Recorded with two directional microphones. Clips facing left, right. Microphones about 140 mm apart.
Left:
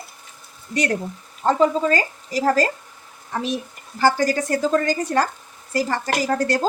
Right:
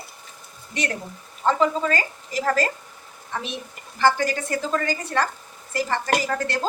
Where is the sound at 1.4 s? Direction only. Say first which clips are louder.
Left 3 dB; 35° left (ahead or behind).